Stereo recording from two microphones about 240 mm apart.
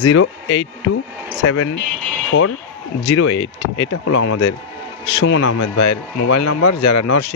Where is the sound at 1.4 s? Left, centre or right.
Left.